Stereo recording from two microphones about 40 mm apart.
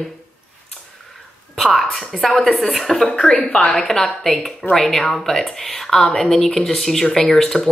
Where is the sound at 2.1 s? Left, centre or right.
Centre.